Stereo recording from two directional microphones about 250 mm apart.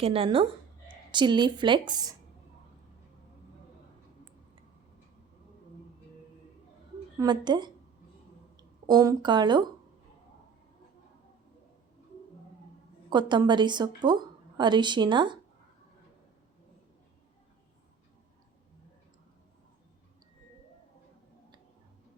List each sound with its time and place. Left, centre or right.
0.0 s a woman's voice: right
7.2 s a woman's voice: centre
8.9 s a woman's voice: centre
13.1 s a woman's voice: centre